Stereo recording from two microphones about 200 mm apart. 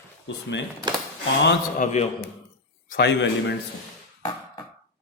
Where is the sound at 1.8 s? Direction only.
35° left (ahead or behind).